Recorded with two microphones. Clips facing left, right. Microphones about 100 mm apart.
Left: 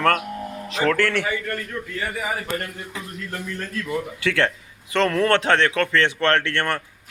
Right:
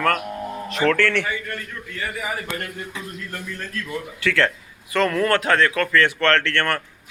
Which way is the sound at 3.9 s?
20° left (ahead or behind).